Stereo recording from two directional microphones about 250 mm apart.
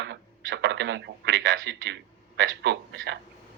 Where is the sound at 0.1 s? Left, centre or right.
Right.